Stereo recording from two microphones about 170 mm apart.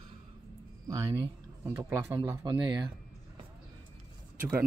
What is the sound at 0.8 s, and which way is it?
Speech, 20° right (ahead or behind).